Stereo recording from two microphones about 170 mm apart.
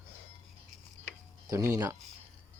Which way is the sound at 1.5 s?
20° right (ahead or behind).